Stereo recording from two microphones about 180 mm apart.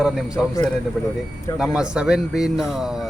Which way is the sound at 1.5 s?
5° right (ahead or behind).